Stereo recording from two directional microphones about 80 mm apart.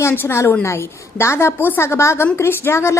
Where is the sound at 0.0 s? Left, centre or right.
Left.